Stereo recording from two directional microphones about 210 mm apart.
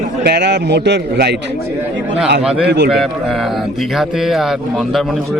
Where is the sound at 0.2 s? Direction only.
50° right (ahead or behind).